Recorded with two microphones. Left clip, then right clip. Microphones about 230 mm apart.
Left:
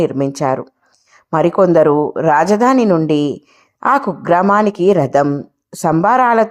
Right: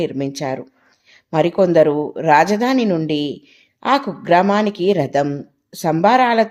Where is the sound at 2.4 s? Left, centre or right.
Centre.